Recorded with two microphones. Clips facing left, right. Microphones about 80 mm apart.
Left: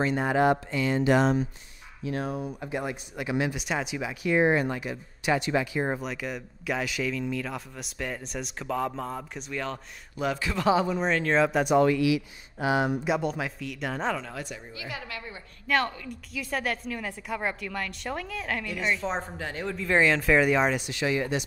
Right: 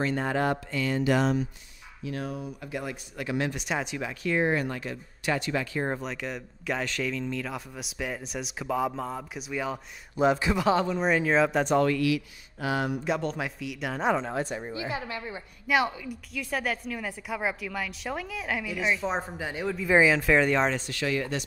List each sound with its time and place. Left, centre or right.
0.0 s speech: centre; by 2.7 s left
2.7 s speech: left; by 9.8 s centre
10.1 s a woman's voice: right
10.6 s speech: centre
11.1 s speech: centre
11.6 s speech: centre
13.0 s speech: centre
14.1 s a woman's voice: right
15.6 s a woman's voice: centre